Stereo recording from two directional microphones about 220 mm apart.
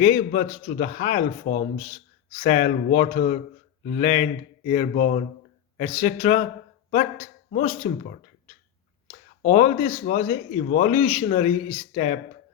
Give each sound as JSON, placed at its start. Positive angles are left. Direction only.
{"t": 0.0, "sound": "speech", "side_deg": 35}
{"t": 9.0, "sound": "speech", "side_deg": 35}